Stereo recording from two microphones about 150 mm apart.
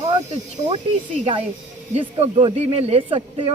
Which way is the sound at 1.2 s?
40° right (ahead or behind).